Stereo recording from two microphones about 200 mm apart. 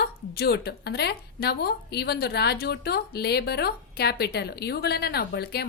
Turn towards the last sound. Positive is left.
turn(degrees=55)  # may be behind; listen again after turning